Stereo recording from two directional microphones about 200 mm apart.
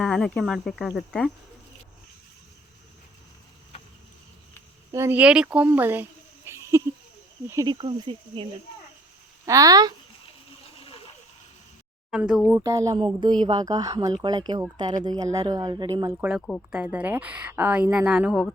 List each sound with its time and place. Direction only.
0.0 s speech: 5° left (ahead or behind)
4.9 s a woman's voice: 15° right (ahead or behind)
9.5 s a woman's voice: 15° right (ahead or behind)
10.8 s splash: 30° left (ahead or behind)
12.1 s a woman's voice: 5° right (ahead or behind)
16.1 s a woman's voice: 5° right (ahead or behind)